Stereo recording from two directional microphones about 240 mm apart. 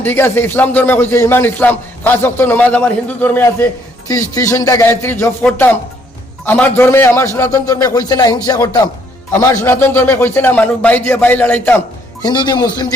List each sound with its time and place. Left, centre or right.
0.0 s a man's voice: centre
12.2 s a man's voice: centre